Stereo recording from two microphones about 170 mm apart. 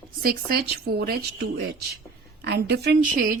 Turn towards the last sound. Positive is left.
turn(degrees=-65)  # may be behind; listen again after turning